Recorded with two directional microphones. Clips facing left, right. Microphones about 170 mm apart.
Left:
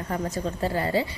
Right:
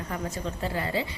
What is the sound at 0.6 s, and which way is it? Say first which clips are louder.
Speech: left 5 dB; 40° left (ahead or behind).